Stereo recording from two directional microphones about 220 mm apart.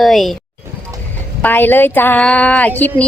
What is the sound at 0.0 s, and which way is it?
Speech, centre (ahead or behind).